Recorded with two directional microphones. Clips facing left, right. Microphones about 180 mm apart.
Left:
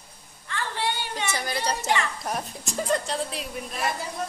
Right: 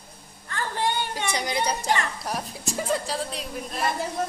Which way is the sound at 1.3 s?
20° right (ahead or behind).